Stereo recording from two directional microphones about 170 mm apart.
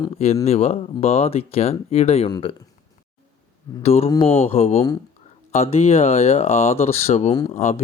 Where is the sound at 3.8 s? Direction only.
35° left (ahead or behind).